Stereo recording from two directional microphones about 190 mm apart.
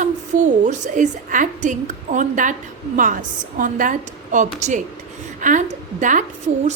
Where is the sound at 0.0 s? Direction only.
40° right (ahead or behind).